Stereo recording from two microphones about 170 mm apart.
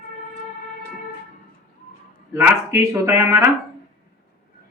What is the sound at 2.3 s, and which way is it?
Speech, 15° right (ahead or behind).